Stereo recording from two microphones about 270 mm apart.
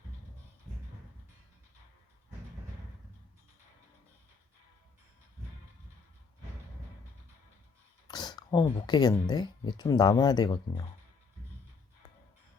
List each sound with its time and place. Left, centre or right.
8.0 s speech: centre